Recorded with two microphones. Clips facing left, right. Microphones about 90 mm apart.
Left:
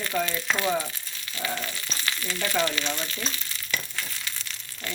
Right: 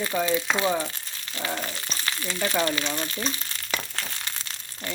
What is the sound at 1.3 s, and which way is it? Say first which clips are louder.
Speech: right 1 dB; 30° right (ahead or behind).